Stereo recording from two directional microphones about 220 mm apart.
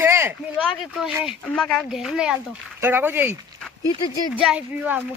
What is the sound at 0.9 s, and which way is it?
Speech, centre (ahead or behind).